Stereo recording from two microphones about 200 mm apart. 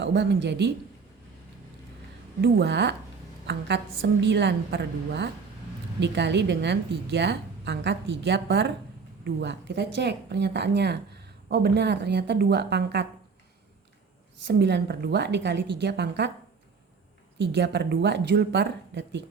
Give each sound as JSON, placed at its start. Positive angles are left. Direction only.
{"t": 0.0, "sound": "a woman's voice", "side_deg": -60}
{"t": 2.4, "sound": "a woman's voice", "side_deg": -60}
{"t": 14.4, "sound": "a woman's voice", "side_deg": -60}
{"t": 17.3, "sound": "a woman's voice", "side_deg": -60}